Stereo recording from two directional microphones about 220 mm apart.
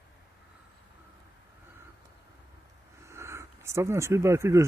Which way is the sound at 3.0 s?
10° right (ahead or behind).